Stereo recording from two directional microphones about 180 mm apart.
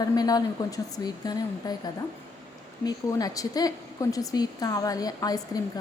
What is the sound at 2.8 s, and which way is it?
A woman's voice, 20° left (ahead or behind).